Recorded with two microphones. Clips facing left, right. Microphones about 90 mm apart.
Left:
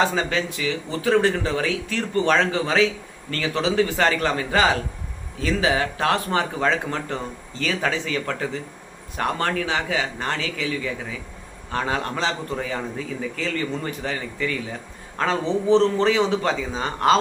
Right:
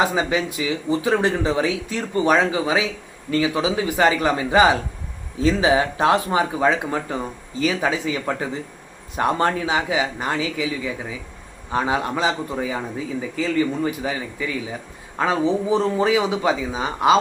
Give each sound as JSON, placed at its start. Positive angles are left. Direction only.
{"t": 0.0, "sound": "speech", "side_deg": -15}